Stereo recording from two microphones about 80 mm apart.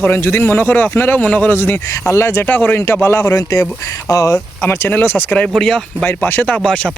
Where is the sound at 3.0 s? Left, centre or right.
Left.